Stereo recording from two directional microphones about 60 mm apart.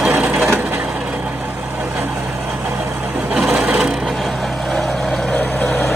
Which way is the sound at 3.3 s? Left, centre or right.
Right.